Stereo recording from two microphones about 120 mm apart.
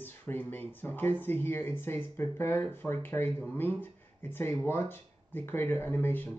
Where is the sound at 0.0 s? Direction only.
15° left (ahead or behind).